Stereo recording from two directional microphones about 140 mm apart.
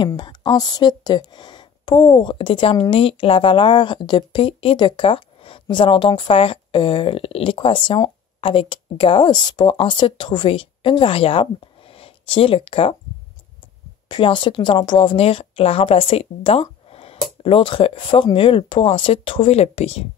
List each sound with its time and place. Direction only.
0.0 s a woman's voice: 30° left (ahead or behind)
14.0 s a woman's voice: 30° left (ahead or behind); by 20.1 s 50° left (ahead or behind)